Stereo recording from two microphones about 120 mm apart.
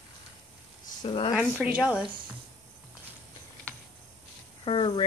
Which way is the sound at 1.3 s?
10° right (ahead or behind).